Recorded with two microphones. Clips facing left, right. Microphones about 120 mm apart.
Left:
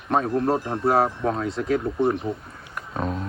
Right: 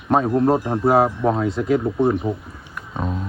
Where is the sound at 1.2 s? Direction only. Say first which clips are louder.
Right 5 dB; 15° right (ahead or behind).